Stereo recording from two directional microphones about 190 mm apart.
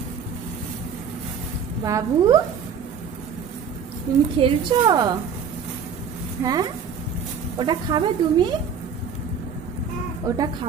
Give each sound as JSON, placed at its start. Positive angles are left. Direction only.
{"t": 1.9, "sound": "speech", "side_deg": -20}
{"t": 4.4, "sound": "speech", "side_deg": -25}
{"t": 6.4, "sound": "speech", "side_deg": -20}
{"t": 10.2, "sound": "speech", "side_deg": -20}